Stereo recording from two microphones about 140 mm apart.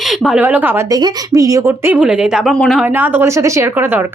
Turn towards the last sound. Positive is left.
turn(degrees=-15)  # may be behind; listen again after turning